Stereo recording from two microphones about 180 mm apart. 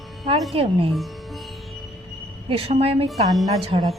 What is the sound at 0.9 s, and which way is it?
Music, centre (ahead or behind).